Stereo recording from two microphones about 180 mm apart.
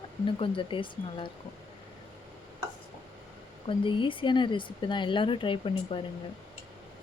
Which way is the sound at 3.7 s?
30° left (ahead or behind).